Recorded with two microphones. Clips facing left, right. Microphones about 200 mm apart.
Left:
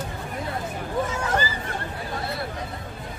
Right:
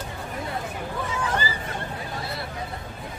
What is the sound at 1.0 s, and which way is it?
Hubbub, 45° left (ahead or behind).